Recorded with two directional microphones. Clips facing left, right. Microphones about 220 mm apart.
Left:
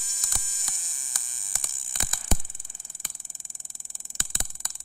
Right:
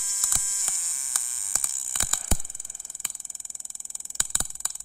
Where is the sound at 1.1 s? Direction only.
15° left (ahead or behind).